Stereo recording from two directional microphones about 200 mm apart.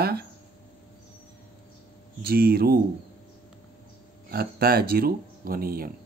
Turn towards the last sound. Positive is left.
turn(degrees=-45)  # may be behind; listen again after turning